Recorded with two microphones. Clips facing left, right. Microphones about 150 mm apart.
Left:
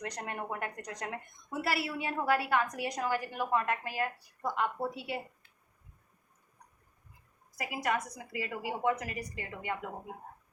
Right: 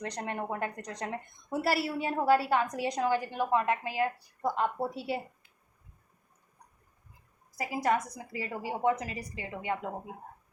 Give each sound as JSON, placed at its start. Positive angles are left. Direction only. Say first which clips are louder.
{"t": 0.0, "sound": "a woman's voice", "louder": "right 3 dB", "side_deg": -30}
{"t": 4.4, "sound": "a woman's voice", "louder": "right 3 dB", "side_deg": -35}
{"t": 7.5, "sound": "a woman's voice", "louder": "right 4 dB", "side_deg": -30}